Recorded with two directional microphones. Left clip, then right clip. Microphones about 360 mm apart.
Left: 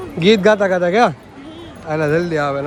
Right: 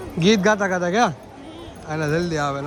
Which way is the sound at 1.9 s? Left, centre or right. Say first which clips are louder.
Left 6 dB; centre.